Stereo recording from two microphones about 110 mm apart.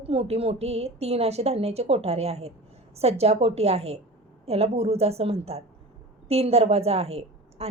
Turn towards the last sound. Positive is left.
turn(degrees=-70)  # may be behind; listen again after turning